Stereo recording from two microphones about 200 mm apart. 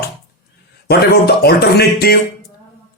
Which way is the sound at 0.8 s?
50° left (ahead or behind).